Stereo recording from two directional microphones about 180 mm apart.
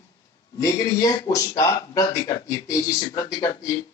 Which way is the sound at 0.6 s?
20° left (ahead or behind).